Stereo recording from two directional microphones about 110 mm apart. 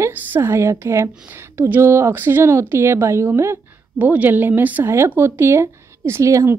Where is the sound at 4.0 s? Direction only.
15° right (ahead or behind).